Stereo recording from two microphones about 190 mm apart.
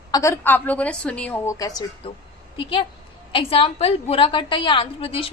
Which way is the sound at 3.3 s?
30° left (ahead or behind).